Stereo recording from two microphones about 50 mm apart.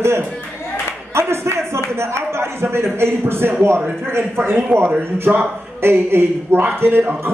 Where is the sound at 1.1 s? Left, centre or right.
Right.